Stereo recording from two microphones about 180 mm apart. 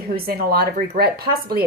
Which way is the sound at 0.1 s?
55° right (ahead or behind).